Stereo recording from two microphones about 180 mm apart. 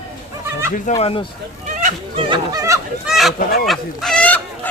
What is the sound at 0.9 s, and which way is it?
Speech, 30° left (ahead or behind).